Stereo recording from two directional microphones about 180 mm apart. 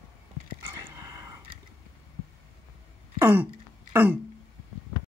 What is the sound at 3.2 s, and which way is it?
Throat clearing, 10° right (ahead or behind).